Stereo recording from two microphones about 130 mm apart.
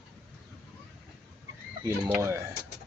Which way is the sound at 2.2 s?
25° right (ahead or behind).